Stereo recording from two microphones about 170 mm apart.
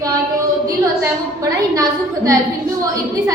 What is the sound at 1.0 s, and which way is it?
A woman's voice, 20° right (ahead or behind).